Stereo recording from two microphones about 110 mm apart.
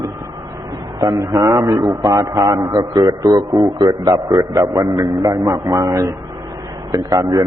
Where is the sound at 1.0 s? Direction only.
35° right (ahead or behind).